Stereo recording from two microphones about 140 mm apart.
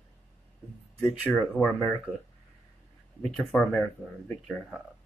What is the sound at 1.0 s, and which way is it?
Speech, 5° left (ahead or behind).